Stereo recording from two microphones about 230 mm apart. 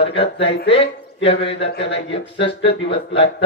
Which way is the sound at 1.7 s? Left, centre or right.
Left.